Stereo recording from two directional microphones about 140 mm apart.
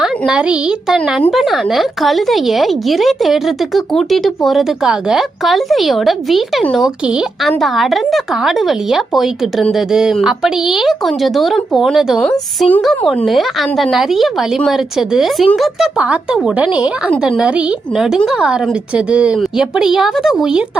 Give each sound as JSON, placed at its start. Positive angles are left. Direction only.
{"t": 0.0, "sound": "a child's voice", "side_deg": -5}